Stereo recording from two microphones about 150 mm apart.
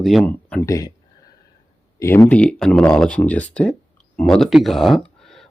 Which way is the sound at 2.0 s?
20° left (ahead or behind).